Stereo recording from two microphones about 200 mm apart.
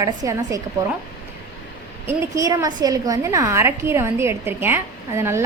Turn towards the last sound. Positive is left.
turn(degrees=-15)  # may be behind; listen again after turning